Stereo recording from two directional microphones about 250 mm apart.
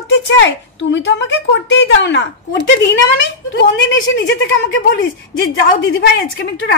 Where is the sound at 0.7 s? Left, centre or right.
Left.